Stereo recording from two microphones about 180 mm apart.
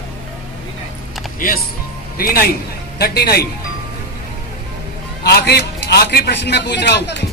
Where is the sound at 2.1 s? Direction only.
55° left (ahead or behind).